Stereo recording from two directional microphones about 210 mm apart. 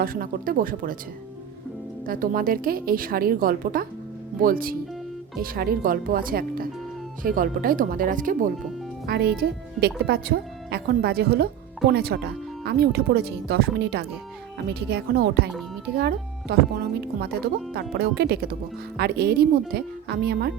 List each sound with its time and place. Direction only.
0.0 s speech: 40° right (ahead or behind)
2.0 s speech: 40° right (ahead or behind)